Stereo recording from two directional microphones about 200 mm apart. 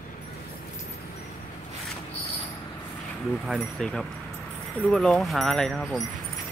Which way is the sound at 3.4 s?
Centre (ahead or behind).